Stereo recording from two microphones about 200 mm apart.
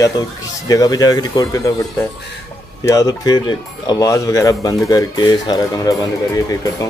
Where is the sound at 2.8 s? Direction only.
15° left (ahead or behind).